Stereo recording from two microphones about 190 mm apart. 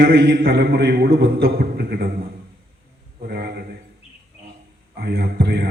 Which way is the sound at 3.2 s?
55° right (ahead or behind).